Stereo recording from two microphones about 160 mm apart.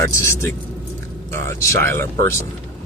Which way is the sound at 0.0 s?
20° left (ahead or behind).